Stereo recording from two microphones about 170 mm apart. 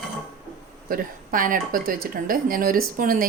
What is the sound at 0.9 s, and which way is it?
Speech, 55° right (ahead or behind).